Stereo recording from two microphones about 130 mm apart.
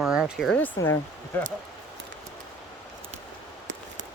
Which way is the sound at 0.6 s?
15° left (ahead or behind).